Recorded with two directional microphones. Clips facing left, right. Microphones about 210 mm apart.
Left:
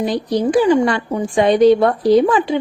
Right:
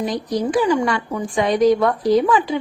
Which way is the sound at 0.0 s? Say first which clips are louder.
Left 4 dB; 30° left (ahead or behind).